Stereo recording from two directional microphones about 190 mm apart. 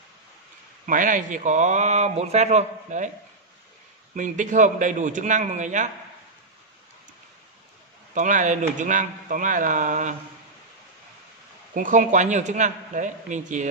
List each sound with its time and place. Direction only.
0.8 s speech: 45° right (ahead or behind)
4.1 s speech: 40° right (ahead or behind)
8.1 s speech: 40° right (ahead or behind)
11.7 s speech: 45° right (ahead or behind)